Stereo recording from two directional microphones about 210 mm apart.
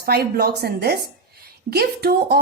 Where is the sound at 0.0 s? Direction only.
45° right (ahead or behind).